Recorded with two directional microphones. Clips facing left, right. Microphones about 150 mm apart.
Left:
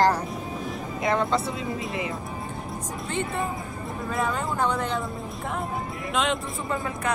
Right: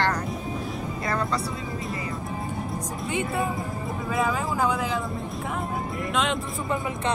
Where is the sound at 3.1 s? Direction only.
5° right (ahead or behind).